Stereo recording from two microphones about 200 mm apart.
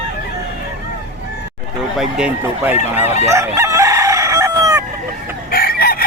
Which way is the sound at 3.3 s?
15° right (ahead or behind).